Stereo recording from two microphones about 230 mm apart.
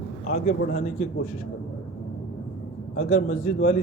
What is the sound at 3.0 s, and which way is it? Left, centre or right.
Speech, left.